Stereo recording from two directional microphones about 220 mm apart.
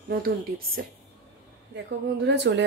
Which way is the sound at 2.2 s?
50° right (ahead or behind).